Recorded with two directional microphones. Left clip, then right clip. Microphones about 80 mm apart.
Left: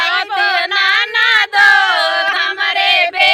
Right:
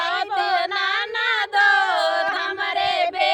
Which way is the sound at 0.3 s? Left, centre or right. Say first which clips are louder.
Left 6 dB; left.